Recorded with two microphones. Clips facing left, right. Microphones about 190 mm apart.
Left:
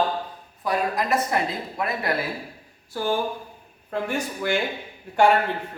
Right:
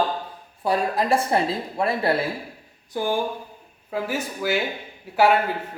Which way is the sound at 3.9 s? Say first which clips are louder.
Even; 5° right (ahead or behind).